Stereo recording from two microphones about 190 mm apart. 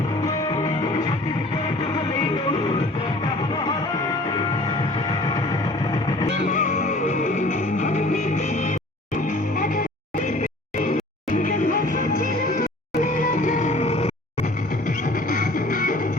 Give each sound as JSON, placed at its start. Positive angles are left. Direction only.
{"t": 6.5, "sound": "music", "side_deg": 40}
{"t": 15.3, "sound": "music", "side_deg": 45}